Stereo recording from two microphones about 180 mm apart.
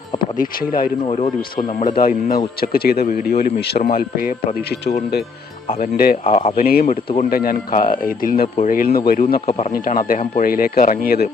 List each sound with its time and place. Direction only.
0.2 s speech: 55° left (ahead or behind)
1.0 s speech: 35° left (ahead or behind)
2.0 s speech: 50° left (ahead or behind)
6.2 s speech: 30° left (ahead or behind)
6.6 s speech: 55° left (ahead or behind)
9.5 s speech: 35° left (ahead or behind)
9.7 s speech: 50° left (ahead or behind)